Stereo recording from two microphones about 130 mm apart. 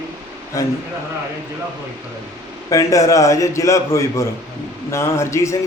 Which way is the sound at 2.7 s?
25° left (ahead or behind).